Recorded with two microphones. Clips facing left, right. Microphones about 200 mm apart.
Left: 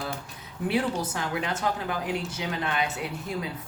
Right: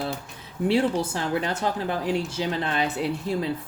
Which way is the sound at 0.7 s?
30° right (ahead or behind).